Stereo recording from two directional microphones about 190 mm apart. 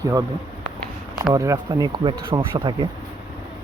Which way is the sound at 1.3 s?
20° right (ahead or behind).